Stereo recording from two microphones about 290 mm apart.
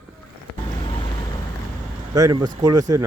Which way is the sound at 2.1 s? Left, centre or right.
Centre.